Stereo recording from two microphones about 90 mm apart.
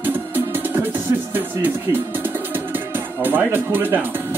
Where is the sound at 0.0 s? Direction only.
20° right (ahead or behind).